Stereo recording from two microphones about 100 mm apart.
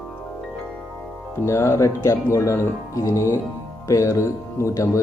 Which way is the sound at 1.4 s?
30° left (ahead or behind).